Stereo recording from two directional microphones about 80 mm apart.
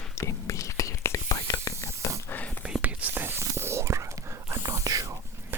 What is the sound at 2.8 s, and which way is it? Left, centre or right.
Whispering, right.